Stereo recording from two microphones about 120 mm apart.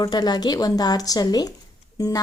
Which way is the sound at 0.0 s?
35° left (ahead or behind).